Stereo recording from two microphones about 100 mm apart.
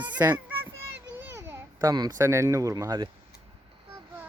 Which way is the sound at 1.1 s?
25° right (ahead or behind).